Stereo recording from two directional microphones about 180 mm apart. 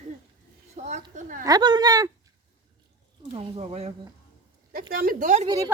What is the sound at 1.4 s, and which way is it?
Speech, 20° right (ahead or behind).